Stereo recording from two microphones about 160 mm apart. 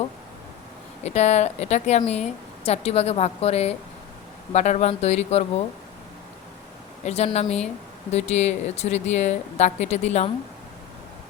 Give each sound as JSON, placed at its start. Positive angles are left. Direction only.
{"t": 1.0, "sound": "a woman's voice", "side_deg": 45}
{"t": 7.0, "sound": "a woman's voice", "side_deg": 40}